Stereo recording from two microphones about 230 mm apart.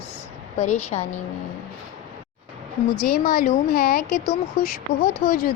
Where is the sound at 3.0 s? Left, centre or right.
Left.